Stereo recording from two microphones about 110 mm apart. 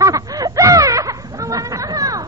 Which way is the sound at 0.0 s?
35° right (ahead or behind).